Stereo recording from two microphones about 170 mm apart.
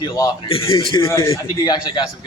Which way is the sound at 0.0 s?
30° left (ahead or behind).